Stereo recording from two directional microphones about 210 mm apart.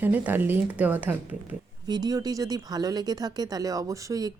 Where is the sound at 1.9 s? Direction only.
20° right (ahead or behind).